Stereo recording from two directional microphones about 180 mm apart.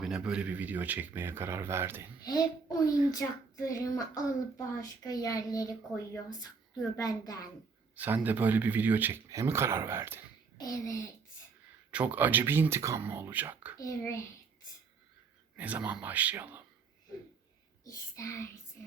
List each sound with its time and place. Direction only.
0.0 s speech: 5° right (ahead or behind)
2.8 s a child's voice: 20° left (ahead or behind)
6.9 s a child's voice: 20° left (ahead or behind)
7.9 s speech: 10° right (ahead or behind)
10.6 s speech: 15° left (ahead or behind)
11.9 s speech: 10° right (ahead or behind)
13.7 s speech: 15° left (ahead or behind)
15.5 s speech: 10° right (ahead or behind)
17.8 s speech: 15° left (ahead or behind)